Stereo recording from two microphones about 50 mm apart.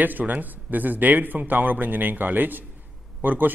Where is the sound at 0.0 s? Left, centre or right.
Right.